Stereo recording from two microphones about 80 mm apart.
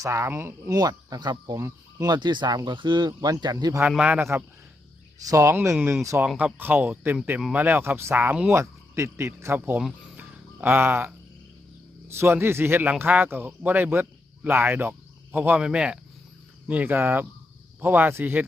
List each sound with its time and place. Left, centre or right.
0.0 s a man's voice: right
0.7 s speech: right
1.5 s speech: right
3.1 s speech: right
3.8 s speech: centre
4.2 s a man's voice: right
5.2 s a man's voice: right
6.3 s speech: right
10.2 s music: right
12.0 s a man's voice: right
15.4 s speech: centre; by 18.4 s right